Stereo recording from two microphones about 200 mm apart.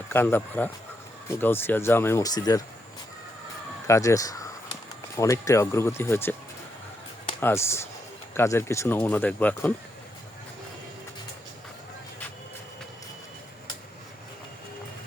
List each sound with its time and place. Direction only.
0.1 s speech: 10° left (ahead or behind)
3.8 s speech: 15° left (ahead or behind)
7.3 s speech: 10° left (ahead or behind)